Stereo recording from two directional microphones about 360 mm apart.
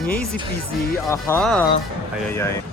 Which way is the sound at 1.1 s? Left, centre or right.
Centre.